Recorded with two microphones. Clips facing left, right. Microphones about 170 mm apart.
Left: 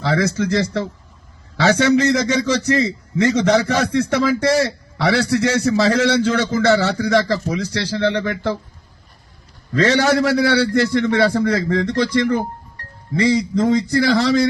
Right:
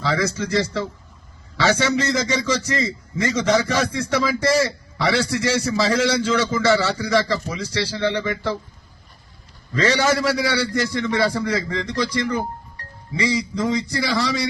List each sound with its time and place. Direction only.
0.0 s speech: 55° left (ahead or behind)
1.6 s a man's voice: 60° left (ahead or behind)
9.8 s a man's voice: 60° left (ahead or behind)